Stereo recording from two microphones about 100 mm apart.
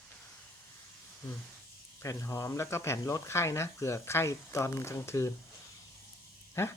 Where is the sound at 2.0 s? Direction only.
30° left (ahead or behind).